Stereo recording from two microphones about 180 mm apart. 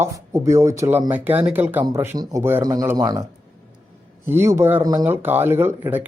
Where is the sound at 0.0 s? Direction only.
15° right (ahead or behind).